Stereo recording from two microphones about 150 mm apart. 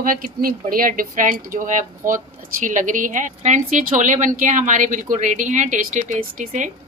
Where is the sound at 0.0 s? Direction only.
70° right (ahead or behind).